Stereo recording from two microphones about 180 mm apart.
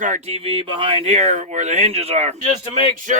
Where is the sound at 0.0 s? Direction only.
40° right (ahead or behind).